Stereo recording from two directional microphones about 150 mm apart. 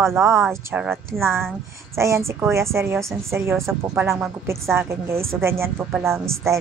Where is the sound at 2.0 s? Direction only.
20° right (ahead or behind).